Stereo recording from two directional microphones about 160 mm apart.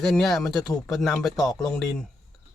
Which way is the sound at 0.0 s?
Centre (ahead or behind).